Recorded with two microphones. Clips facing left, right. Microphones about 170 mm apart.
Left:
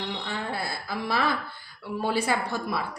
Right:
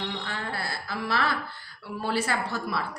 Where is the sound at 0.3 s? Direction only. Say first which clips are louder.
Left 2 dB; 15° left (ahead or behind).